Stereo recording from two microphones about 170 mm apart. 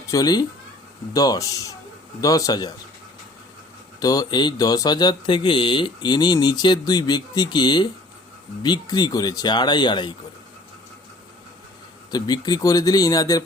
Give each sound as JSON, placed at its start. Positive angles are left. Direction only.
{"t": 0.1, "sound": "speech", "side_deg": 20}
{"t": 4.0, "sound": "speech", "side_deg": 20}
{"t": 12.1, "sound": "speech", "side_deg": 25}